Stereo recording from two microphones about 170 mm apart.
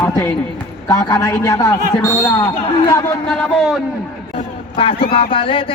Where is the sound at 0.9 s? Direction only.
25° left (ahead or behind).